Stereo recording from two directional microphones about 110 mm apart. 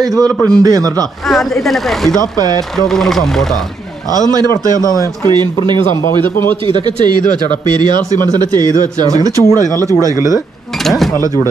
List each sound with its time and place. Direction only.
0.1 s speech: 5° left (ahead or behind)
0.6 s speech: 30° right (ahead or behind)
1.3 s speech: centre (ahead or behind)
2.3 s speech: 35° right (ahead or behind)
2.9 s speech: 5° left (ahead or behind)
4.1 s speech: 35° right (ahead or behind)
5.2 s speech: 40° right (ahead or behind)
7.8 s speech: 35° right (ahead or behind)